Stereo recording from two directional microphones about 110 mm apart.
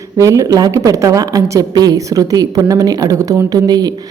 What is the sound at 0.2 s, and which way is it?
A woman's voice, 30° right (ahead or behind).